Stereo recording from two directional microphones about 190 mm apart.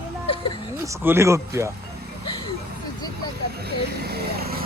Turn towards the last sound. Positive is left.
turn(degrees=-55)  # may be behind; listen again after turning